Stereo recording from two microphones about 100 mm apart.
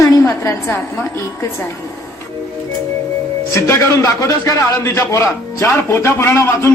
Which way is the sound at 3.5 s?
30° left (ahead or behind).